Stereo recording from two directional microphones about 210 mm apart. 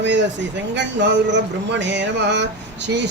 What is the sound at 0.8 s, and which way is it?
Speech, 55° right (ahead or behind).